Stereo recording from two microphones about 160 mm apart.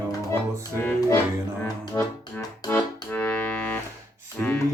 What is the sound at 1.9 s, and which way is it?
Music, 20° left (ahead or behind).